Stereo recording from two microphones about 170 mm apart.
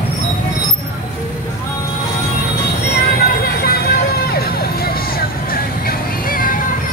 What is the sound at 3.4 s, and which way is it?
Vehicle, 65° left (ahead or behind).